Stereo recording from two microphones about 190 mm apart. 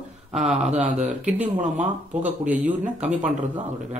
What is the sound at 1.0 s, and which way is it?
Speech, 10° right (ahead or behind).